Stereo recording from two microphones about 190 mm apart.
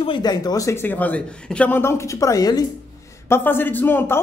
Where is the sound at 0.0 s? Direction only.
25° left (ahead or behind).